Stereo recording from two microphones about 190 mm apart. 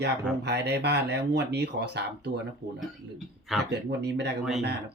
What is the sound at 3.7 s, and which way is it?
Speech, 65° right (ahead or behind).